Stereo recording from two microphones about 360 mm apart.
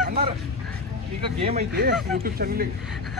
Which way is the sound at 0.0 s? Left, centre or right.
Right.